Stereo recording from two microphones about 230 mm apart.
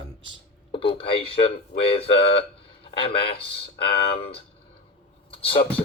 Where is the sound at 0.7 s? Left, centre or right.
Left.